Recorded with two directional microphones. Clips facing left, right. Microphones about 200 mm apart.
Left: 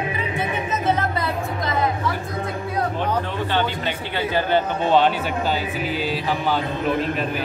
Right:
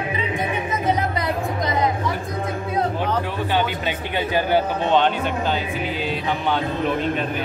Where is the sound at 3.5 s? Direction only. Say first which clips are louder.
Right 1 dB; 15° right (ahead or behind).